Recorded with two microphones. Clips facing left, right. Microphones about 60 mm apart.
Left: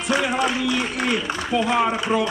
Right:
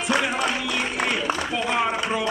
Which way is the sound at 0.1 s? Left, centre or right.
Centre.